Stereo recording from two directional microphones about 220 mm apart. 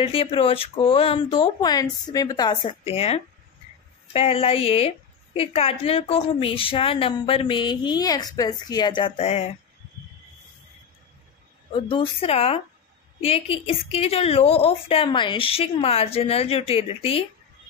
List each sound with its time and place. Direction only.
0.0 s a woman's voice: 25° left (ahead or behind)
11.7 s a woman's voice: 25° left (ahead or behind)